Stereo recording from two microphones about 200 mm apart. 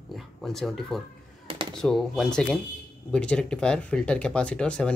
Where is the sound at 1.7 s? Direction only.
Centre (ahead or behind).